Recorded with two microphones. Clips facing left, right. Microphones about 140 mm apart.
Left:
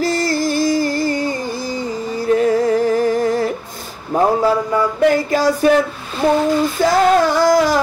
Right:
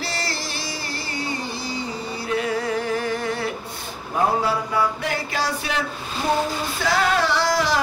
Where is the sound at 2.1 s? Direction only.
40° left (ahead or behind).